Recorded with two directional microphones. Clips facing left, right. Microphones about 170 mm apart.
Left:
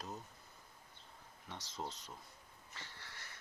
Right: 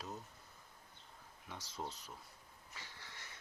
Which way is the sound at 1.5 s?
5° right (ahead or behind).